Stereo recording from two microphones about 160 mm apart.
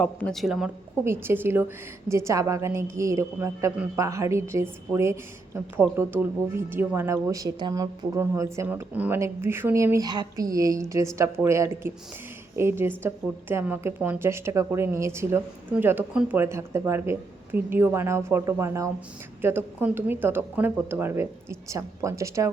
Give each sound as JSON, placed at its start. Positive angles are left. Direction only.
{"t": 0.0, "sound": "speech", "side_deg": 5}
{"t": 1.0, "sound": "speech", "side_deg": -15}